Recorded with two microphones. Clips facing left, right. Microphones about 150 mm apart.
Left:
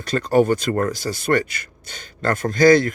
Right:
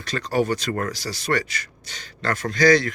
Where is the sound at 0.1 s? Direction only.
50° left (ahead or behind).